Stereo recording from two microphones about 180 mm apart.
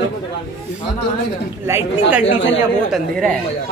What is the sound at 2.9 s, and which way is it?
Speech, 5° left (ahead or behind).